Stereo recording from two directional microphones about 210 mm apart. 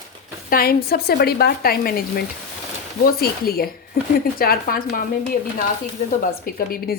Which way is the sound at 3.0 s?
45° left (ahead or behind).